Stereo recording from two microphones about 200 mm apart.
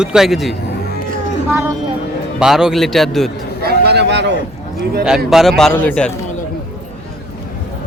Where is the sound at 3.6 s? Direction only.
55° right (ahead or behind).